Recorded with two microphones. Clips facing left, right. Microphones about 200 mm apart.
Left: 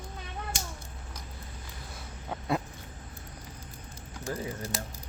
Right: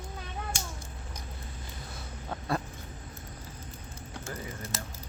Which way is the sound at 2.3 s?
10° left (ahead or behind).